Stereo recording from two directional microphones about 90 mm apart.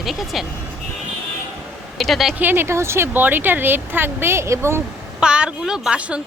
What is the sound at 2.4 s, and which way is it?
Speech, 25° right (ahead or behind).